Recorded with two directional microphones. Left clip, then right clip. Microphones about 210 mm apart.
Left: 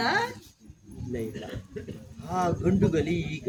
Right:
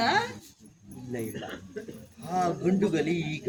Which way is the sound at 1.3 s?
40° left (ahead or behind).